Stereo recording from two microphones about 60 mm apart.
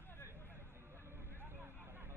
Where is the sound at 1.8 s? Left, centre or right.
Right.